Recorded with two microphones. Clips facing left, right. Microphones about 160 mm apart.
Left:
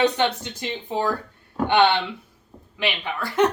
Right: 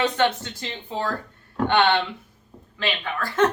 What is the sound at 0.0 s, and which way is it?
Speech, 15° left (ahead or behind).